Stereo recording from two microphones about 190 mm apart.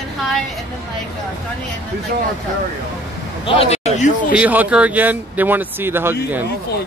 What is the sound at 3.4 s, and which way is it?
Speech, 30° left (ahead or behind).